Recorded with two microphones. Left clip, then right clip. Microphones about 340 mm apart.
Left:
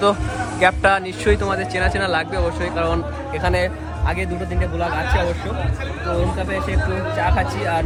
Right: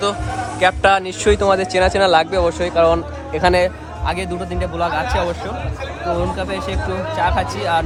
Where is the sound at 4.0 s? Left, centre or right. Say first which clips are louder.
Right 3 dB; centre.